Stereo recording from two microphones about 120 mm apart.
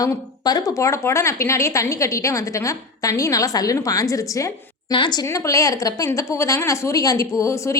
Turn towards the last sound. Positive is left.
turn(degrees=25)  # may be behind; listen again after turning